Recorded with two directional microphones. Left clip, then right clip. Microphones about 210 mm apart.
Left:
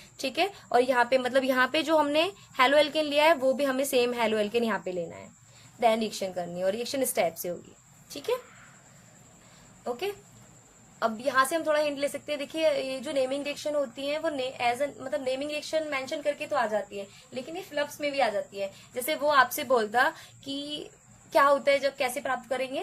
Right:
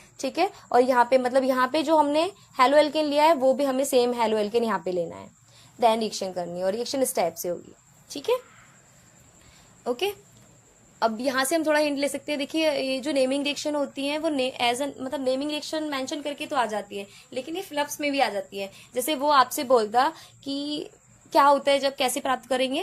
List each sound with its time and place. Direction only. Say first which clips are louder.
0.3 s a woman's voice: right 4 dB; 10° right (ahead or behind)
8.1 s a woman's voice: right 5 dB; 20° right (ahead or behind)
9.8 s a woman's voice: right 5 dB; 30° right (ahead or behind)